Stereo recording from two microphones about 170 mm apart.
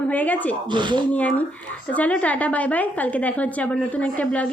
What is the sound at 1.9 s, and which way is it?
A woman's voice, 10° left (ahead or behind).